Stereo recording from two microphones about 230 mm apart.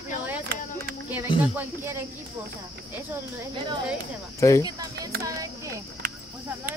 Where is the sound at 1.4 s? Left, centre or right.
Centre.